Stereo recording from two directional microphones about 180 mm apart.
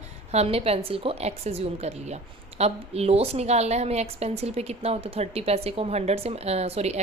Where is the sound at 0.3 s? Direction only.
35° right (ahead or behind).